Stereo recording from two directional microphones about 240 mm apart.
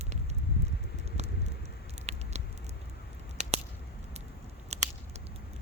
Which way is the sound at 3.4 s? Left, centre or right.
Right.